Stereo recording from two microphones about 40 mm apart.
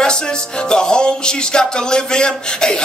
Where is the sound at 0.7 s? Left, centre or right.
Left.